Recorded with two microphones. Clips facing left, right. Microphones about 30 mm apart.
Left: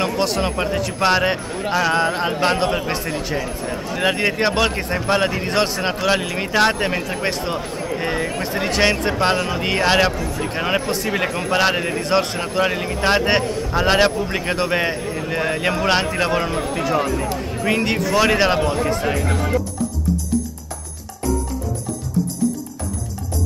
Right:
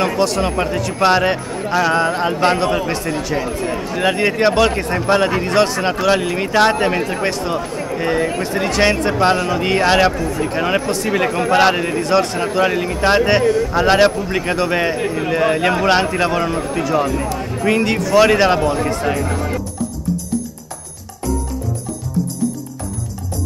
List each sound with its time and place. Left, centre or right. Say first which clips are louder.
0.2 s a man's voice: right 3 dB; centre
0.5 s a man's voice: right 2 dB; centre
7.2 s a man's voice: right 2 dB; centre
7.5 s speech: right 3 dB; centre
8.4 s speech: right 2 dB; centre
12.0 s a man's voice: right 3 dB; centre
12.5 s speech: right 3 dB; centre
15.0 s speech: right 5 dB; centre
15.3 s a man's voice: right 5 dB; centre